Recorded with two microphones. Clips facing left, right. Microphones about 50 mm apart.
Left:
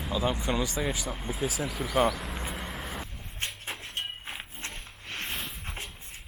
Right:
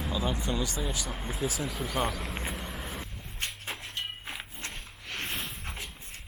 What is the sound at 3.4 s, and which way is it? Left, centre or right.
Music, left.